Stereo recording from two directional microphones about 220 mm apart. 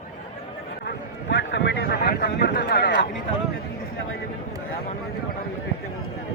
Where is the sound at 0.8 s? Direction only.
50° left (ahead or behind).